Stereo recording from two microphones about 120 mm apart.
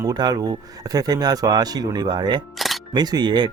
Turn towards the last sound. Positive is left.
turn(degrees=-40)  # may be behind; listen again after turning